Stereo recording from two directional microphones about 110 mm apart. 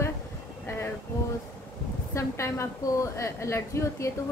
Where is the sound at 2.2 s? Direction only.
25° left (ahead or behind).